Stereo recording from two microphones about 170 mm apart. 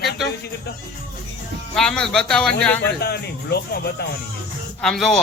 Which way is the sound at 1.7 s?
5° left (ahead or behind).